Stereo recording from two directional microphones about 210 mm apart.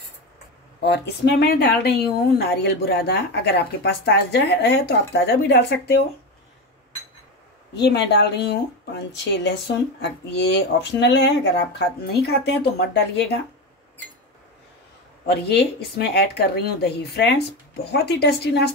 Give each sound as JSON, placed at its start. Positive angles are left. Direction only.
{"t": 0.8, "sound": "speech", "side_deg": 55}
{"t": 7.7, "sound": "speech", "side_deg": 50}
{"t": 15.2, "sound": "speech", "side_deg": 50}